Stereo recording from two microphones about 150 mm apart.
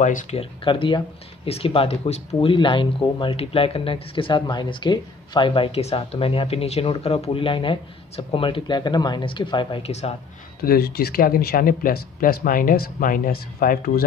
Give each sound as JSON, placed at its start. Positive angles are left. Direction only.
{"t": 0.0, "sound": "speech", "side_deg": 55}
{"t": 0.4, "sound": "speech", "side_deg": 35}
{"t": 10.6, "sound": "speech", "side_deg": 90}